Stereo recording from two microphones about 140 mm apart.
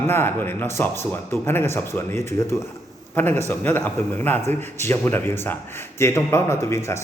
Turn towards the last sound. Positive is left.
turn(degrees=20)  # may be behind; listen again after turning